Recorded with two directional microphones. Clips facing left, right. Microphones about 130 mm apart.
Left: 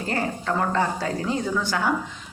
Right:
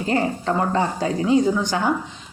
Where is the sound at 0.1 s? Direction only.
20° right (ahead or behind).